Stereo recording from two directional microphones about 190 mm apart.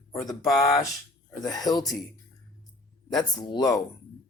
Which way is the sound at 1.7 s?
20° left (ahead or behind).